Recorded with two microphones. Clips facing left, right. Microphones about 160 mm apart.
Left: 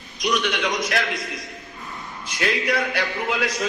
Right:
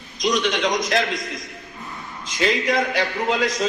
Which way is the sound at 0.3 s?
20° right (ahead or behind).